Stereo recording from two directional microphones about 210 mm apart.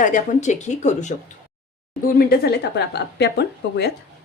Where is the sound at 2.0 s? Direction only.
45° left (ahead or behind).